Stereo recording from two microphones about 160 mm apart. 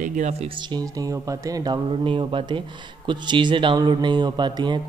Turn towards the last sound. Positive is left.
turn(degrees=-30)  # may be behind; listen again after turning